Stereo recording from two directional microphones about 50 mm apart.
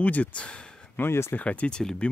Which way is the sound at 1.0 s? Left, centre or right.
Left.